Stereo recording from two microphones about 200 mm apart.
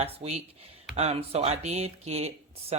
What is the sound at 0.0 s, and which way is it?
Speech, 30° right (ahead or behind).